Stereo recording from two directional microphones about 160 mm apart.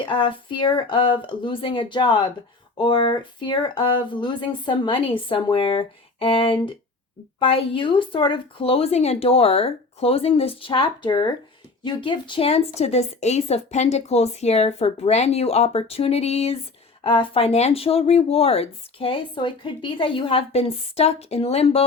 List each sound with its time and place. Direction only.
0.0 s speech: 30° left (ahead or behind)